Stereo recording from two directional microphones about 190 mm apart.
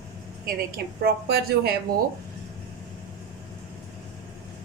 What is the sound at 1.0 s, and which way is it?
Speech, 55° right (ahead or behind).